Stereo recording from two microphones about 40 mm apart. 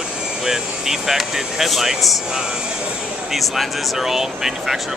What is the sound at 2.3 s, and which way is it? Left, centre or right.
Speech, centre.